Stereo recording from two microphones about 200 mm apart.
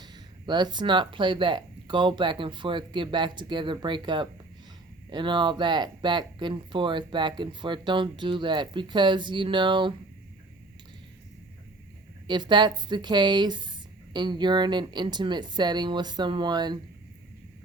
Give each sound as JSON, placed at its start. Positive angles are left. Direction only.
{"t": 0.0, "sound": "speech", "side_deg": -20}
{"t": 12.3, "sound": "speech", "side_deg": -20}